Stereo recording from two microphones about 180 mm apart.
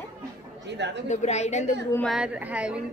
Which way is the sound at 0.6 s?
75° right (ahead or behind).